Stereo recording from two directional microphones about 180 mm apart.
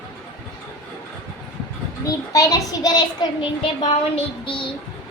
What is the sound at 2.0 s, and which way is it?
A child's voice, 20° left (ahead or behind).